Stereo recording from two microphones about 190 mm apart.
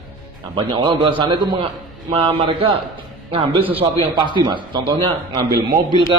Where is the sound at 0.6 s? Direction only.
25° right (ahead or behind).